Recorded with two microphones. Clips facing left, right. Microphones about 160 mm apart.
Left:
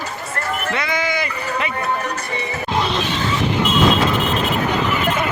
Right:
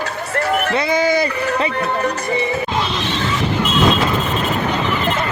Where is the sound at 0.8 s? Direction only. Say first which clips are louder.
Right 8 dB; 35° right (ahead or behind).